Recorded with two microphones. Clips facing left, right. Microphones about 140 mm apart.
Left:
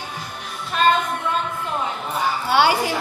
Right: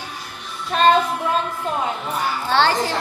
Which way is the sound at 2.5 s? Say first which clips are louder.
Even; 10° left (ahead or behind).